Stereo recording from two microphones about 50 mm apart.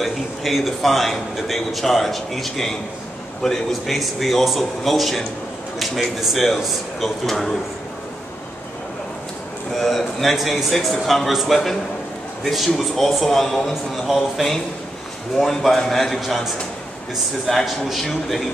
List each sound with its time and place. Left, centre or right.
0.0 s a man's voice: centre
9.8 s a man's voice: centre
17.5 s a man's voice: centre